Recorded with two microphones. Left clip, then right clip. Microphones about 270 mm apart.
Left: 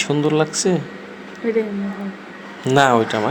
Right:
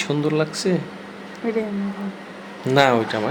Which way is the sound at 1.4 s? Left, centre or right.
Centre.